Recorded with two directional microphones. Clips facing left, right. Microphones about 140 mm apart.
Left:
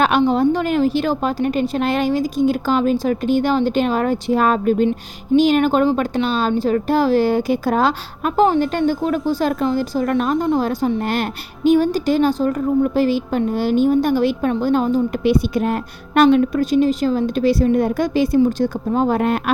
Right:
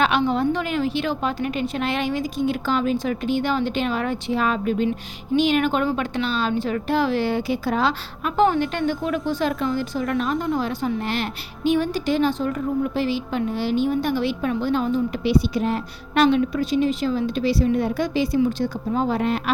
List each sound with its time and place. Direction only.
0.3 s a woman's voice: 40° left (ahead or behind); by 19.5 s 55° left (ahead or behind)